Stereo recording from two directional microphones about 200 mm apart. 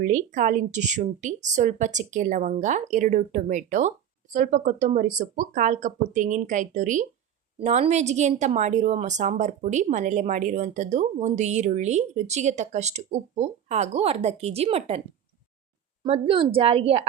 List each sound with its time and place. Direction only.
0.0 s a woman's voice: 40° right (ahead or behind)
16.0 s a woman's voice: 30° right (ahead or behind)